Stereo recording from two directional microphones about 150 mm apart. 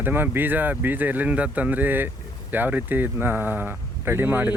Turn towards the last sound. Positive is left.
turn(degrees=-10)  # may be behind; listen again after turning